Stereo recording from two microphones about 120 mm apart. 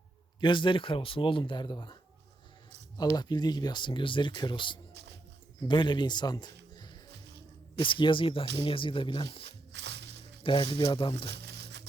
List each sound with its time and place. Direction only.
0.3 s speech: 40° left (ahead or behind)
3.0 s speech: 35° left (ahead or behind)
10.4 s speech: 45° left (ahead or behind)